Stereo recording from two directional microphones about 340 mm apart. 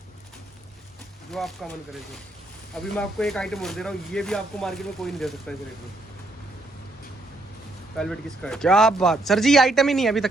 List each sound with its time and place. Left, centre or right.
1.3 s speech: centre
7.9 s speech: centre